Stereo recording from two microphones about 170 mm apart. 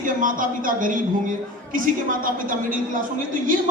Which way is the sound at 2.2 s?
50° right (ahead or behind).